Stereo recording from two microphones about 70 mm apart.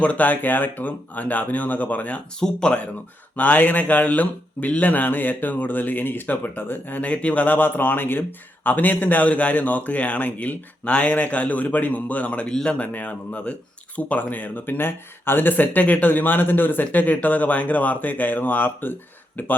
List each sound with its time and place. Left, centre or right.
0.0 s speech: left